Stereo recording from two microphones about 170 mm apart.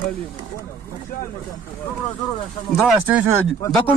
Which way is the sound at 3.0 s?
10° right (ahead or behind).